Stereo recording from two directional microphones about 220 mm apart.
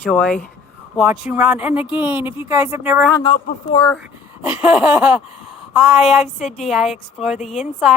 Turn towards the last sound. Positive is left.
turn(degrees=0)  # may be behind; listen again after turning